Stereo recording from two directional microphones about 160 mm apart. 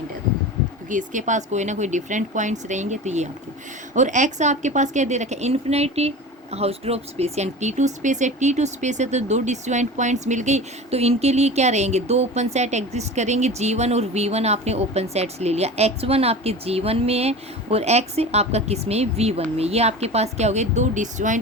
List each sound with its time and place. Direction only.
0.9 s a woman's voice: 55° right (ahead or behind)